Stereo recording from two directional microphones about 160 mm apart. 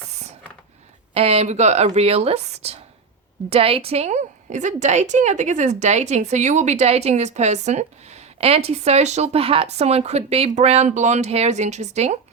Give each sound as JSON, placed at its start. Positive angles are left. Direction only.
{"t": 1.1, "sound": "a woman's voice", "side_deg": -40}